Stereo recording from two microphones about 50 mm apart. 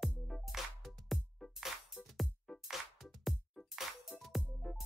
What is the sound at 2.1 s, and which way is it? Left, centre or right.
Music, centre.